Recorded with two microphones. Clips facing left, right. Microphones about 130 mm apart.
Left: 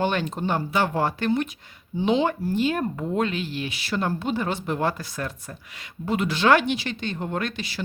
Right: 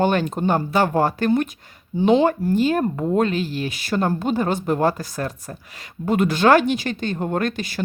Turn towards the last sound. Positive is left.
turn(degrees=-50)  # may be behind; listen again after turning